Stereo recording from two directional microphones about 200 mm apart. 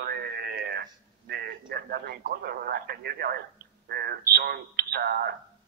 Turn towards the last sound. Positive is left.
turn(degrees=-50)  # may be behind; listen again after turning